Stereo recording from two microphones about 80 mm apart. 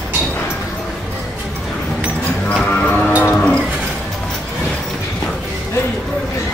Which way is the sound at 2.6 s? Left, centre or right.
Left.